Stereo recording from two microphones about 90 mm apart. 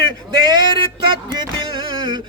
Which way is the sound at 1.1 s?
60° right (ahead or behind).